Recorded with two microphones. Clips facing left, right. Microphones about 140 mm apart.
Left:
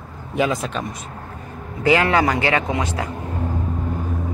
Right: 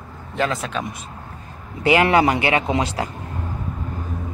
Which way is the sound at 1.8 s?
15° right (ahead or behind).